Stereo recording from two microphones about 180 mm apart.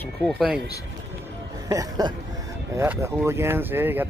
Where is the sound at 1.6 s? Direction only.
20° right (ahead or behind).